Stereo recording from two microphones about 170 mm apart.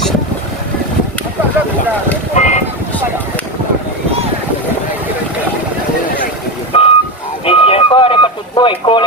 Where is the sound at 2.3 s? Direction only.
45° left (ahead or behind).